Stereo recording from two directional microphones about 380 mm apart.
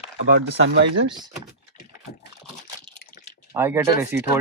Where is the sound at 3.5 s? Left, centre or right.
Centre.